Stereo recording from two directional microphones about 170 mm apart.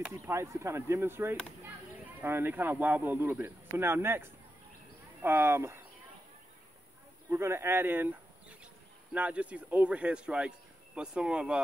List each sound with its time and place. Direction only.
0.1 s speech: 15° right (ahead or behind)
7.2 s speech: 15° right (ahead or behind)